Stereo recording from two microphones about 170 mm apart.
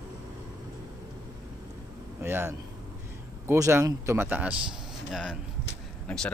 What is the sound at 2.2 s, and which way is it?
A man's voice, 15° right (ahead or behind).